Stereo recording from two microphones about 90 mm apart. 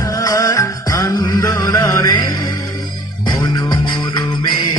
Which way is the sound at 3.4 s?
55° left (ahead or behind).